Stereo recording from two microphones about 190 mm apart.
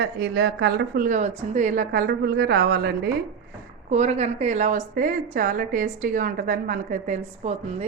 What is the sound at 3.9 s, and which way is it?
A woman's voice, 35° right (ahead or behind).